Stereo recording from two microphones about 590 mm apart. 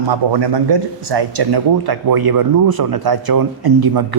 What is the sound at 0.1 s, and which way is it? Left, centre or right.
A man's voice, right.